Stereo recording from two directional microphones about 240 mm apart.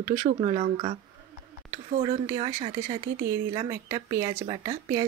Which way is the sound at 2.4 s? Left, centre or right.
Centre.